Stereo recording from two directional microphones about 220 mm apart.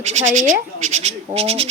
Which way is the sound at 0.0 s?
30° right (ahead or behind).